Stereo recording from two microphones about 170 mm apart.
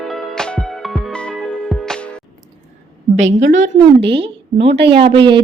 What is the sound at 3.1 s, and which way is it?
A woman's voice, 45° right (ahead or behind).